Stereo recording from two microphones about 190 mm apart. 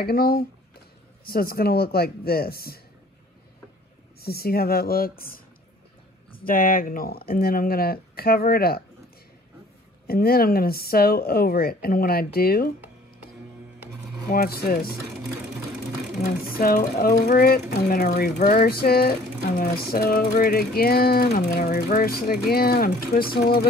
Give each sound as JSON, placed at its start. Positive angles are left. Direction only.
{"t": 0.0, "sound": "speech", "side_deg": 50}
{"t": 4.2, "sound": "speech", "side_deg": 55}
{"t": 6.3, "sound": "speech", "side_deg": 50}
{"t": 10.0, "sound": "speech", "side_deg": 50}
{"t": 14.3, "sound": "speech", "side_deg": 50}
{"t": 16.3, "sound": "speech", "side_deg": 50}